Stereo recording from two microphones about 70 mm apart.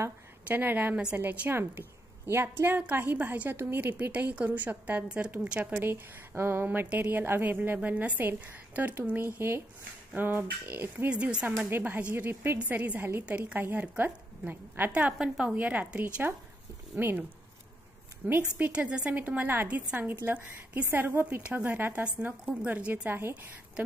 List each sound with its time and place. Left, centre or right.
0.5 s a woman's voice: right
11.1 s a woman's voice: centre
16.9 s speech: right
18.2 s speech: right
18.6 s a woman's voice: centre
22.0 s speech: centre
23.0 s a woman's voice: right